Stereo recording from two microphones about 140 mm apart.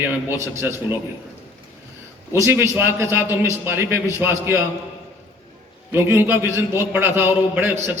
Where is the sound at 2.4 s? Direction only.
20° right (ahead or behind).